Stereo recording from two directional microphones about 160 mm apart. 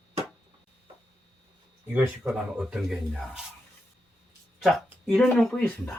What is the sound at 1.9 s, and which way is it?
Speech, 10° right (ahead or behind).